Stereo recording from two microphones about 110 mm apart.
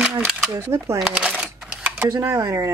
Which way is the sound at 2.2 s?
25° right (ahead or behind).